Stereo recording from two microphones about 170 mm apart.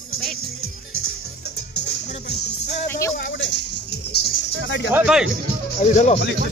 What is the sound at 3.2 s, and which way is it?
Music, 90° left.